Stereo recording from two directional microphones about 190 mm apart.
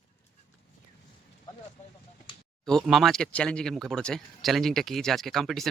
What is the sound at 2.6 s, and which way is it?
Speech, centre (ahead or behind).